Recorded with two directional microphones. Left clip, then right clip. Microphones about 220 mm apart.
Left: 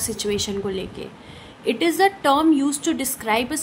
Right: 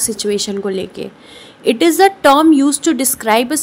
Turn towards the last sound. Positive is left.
turn(degrees=-30)  # may be behind; listen again after turning